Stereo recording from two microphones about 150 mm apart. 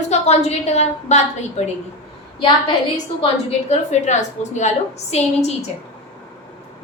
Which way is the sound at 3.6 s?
50° left (ahead or behind).